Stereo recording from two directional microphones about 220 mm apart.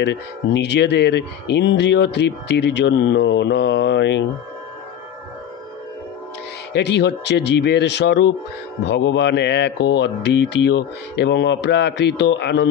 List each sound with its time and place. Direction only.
0.0 s speech: 50° left (ahead or behind)
6.7 s speech: 50° left (ahead or behind)